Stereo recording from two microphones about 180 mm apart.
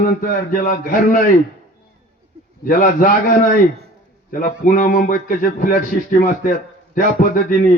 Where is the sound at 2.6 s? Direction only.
50° left (ahead or behind).